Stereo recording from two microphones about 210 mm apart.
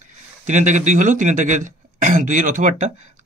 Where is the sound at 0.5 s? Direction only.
35° right (ahead or behind).